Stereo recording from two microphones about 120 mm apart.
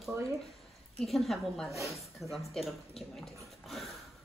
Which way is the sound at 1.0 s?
Centre (ahead or behind).